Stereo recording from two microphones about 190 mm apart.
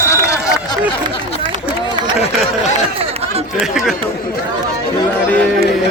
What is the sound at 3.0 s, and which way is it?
Chatter, 30° right (ahead or behind).